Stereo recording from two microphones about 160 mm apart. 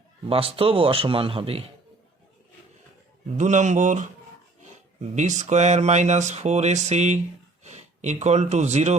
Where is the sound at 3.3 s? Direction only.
50° right (ahead or behind).